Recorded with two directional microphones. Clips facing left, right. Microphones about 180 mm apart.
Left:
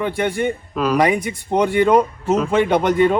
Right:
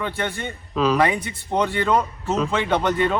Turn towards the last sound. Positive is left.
turn(degrees=15)  # may be behind; listen again after turning